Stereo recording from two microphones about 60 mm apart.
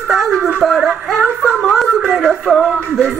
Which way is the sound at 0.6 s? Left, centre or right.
Centre.